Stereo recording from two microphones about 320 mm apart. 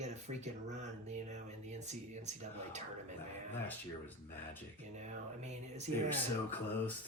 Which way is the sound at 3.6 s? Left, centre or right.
Centre.